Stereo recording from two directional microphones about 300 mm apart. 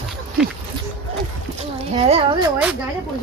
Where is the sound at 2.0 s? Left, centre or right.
Centre.